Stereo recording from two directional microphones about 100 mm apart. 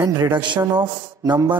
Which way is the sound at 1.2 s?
40° right (ahead or behind).